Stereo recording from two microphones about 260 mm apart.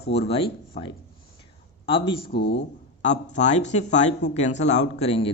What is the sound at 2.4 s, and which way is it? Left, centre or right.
Speech, left.